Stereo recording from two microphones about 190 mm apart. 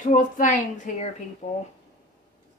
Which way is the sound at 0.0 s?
45° left (ahead or behind).